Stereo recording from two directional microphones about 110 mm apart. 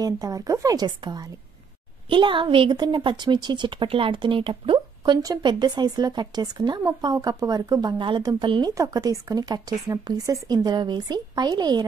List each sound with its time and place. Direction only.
0.0 s speech: 35° right (ahead or behind)
2.0 s a woman's voice: 50° right (ahead or behind)
4.7 s a woman's voice: 40° right (ahead or behind)